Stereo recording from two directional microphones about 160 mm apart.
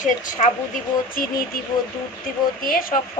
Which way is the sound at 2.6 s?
65° left (ahead or behind).